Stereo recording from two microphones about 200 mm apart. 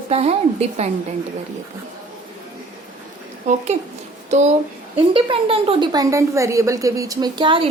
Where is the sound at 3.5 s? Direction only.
35° right (ahead or behind).